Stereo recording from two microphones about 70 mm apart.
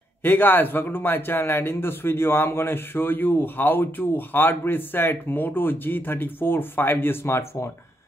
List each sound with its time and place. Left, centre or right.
0.2 s speech: left